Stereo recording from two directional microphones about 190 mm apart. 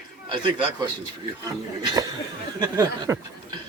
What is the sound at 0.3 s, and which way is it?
A man's voice, 25° right (ahead or behind).